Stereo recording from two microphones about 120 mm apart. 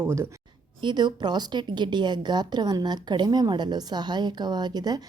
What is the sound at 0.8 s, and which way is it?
A woman's voice, 35° right (ahead or behind).